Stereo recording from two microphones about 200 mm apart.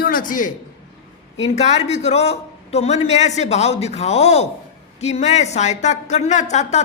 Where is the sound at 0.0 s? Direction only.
45° left (ahead or behind).